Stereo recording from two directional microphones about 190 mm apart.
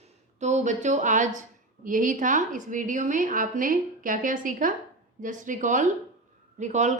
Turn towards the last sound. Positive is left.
turn(degrees=-40)  # may be behind; listen again after turning